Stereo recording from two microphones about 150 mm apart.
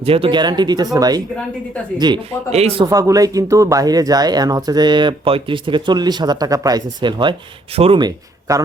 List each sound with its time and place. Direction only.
0.0 s speech: 40° right (ahead or behind)
2.5 s a man's voice: 45° right (ahead or behind)
2.8 s speech: 25° right (ahead or behind)